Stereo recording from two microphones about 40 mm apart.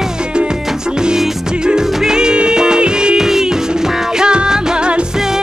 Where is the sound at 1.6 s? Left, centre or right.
Centre.